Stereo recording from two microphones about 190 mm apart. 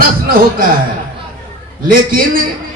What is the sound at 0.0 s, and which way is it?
Speech, 50° right (ahead or behind).